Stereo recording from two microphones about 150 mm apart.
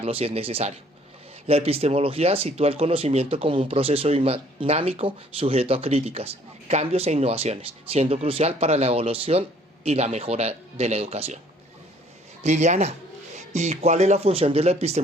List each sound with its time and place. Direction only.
0.0 s speech: 40° right (ahead or behind)
12.4 s speech: 50° right (ahead or behind)